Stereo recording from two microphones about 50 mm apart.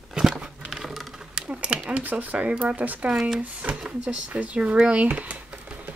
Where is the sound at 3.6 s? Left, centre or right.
Right.